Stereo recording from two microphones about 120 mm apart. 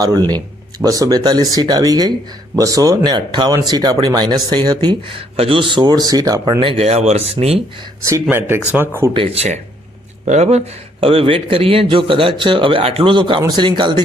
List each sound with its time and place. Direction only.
0.0 s speech: 35° right (ahead or behind)
6.6 s speech: 50° right (ahead or behind)
8.1 s speech: 20° right (ahead or behind)
9.1 s speech: 55° right (ahead or behind)
11.0 s a man's voice: 50° right (ahead or behind)